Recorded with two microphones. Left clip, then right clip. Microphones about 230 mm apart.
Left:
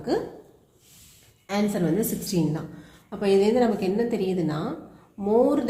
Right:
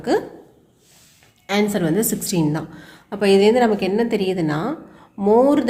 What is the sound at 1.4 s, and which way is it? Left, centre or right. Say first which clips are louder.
A woman's voice: right 6 dB; right.